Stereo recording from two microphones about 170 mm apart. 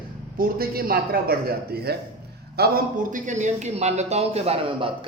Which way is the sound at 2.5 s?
65° right (ahead or behind).